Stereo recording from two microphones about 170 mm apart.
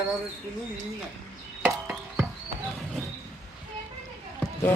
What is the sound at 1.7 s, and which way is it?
Frog, 5° right (ahead or behind).